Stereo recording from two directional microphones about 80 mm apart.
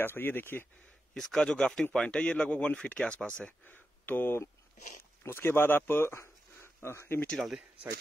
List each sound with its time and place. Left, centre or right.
0.0 s a man's voice: left
1.1 s speech: centre
3.6 s speech: left
7.2 s speech: centre